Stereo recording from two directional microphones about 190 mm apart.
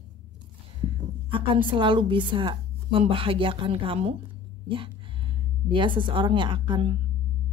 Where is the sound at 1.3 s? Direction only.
25° right (ahead or behind).